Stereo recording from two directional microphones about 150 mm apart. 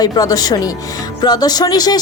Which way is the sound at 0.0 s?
25° left (ahead or behind).